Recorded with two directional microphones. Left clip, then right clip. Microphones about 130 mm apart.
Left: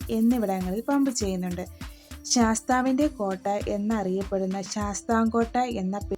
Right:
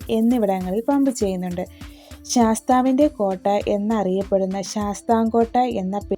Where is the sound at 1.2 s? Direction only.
30° right (ahead or behind).